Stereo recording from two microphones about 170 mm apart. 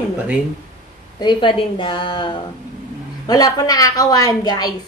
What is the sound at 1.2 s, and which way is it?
A woman's voice, 25° left (ahead or behind).